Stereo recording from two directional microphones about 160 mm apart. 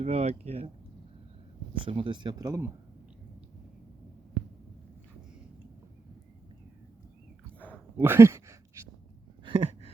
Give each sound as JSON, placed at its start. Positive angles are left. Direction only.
{"t": 0.0, "sound": "speech", "side_deg": -40}
{"t": 1.7, "sound": "speech", "side_deg": -35}
{"t": 7.9, "sound": "speech", "side_deg": -15}
{"t": 9.4, "sound": "a sound", "side_deg": -35}